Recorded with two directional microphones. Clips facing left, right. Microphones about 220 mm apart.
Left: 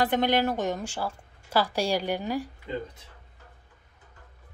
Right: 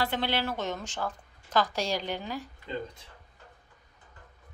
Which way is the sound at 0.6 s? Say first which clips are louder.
Left 4 dB; 15° left (ahead or behind).